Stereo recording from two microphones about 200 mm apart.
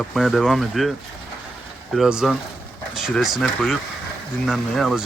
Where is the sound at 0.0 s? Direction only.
Centre (ahead or behind).